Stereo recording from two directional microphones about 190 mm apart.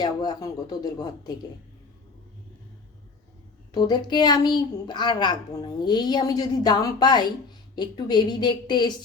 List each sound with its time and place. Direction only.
0.0 s a woman's voice: 20° left (ahead or behind)
3.7 s a woman's voice: 20° left (ahead or behind)